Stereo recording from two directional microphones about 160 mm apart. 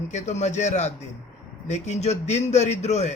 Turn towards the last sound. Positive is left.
turn(degrees=45)  # may be behind; listen again after turning